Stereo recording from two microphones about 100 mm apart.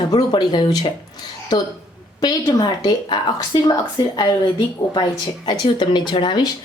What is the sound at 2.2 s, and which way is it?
Speech, 45° left (ahead or behind).